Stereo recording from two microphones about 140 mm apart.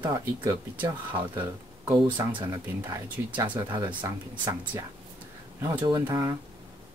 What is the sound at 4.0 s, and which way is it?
Speech, 20° right (ahead or behind).